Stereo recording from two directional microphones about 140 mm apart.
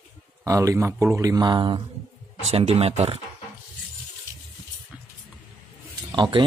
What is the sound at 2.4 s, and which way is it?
Speech, 45° right (ahead or behind).